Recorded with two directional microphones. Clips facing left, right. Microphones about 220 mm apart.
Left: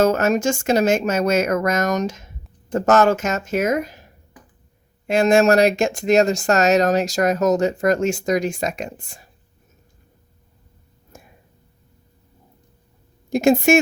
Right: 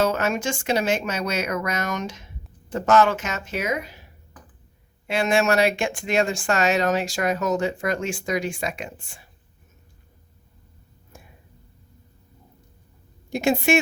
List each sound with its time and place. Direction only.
0.0 s speech: 45° left (ahead or behind)
11.1 s a sound: 45° left (ahead or behind)
13.3 s speech: 45° left (ahead or behind)